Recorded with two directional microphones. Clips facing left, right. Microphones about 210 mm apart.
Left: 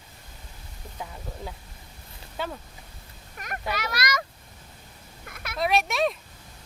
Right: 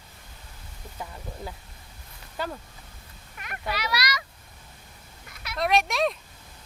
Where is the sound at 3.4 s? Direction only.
45° left (ahead or behind).